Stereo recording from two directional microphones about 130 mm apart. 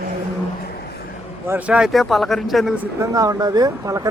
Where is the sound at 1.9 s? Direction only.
Centre (ahead or behind).